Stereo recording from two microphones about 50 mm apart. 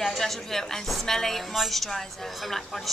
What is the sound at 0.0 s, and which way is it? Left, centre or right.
A woman's voice, centre.